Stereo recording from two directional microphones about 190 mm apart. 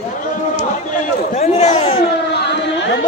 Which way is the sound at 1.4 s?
35° left (ahead or behind).